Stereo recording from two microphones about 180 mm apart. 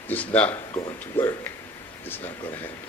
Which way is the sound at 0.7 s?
25° left (ahead or behind).